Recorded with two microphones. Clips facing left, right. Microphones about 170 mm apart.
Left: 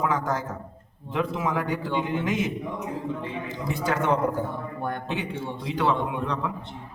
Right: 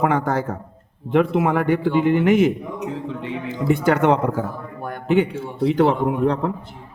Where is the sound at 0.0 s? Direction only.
65° right (ahead or behind); by 4.4 s 80° right.